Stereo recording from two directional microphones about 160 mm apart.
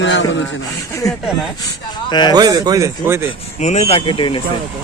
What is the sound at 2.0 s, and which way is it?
Speech, 25° left (ahead or behind).